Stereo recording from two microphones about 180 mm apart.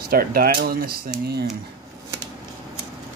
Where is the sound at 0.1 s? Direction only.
55° right (ahead or behind).